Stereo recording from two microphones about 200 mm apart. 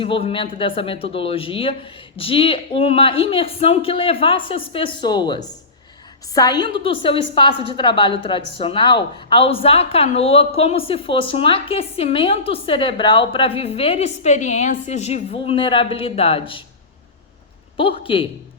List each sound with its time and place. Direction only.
0.0 s a woman's voice: 30° left (ahead or behind)
17.7 s a woman's voice: 25° left (ahead or behind)